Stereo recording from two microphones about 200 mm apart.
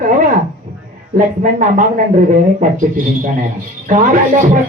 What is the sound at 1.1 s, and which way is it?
Speech, 40° right (ahead or behind).